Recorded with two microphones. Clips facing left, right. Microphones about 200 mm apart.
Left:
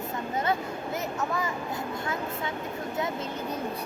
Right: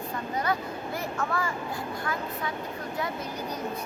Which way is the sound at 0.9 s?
20° left (ahead or behind).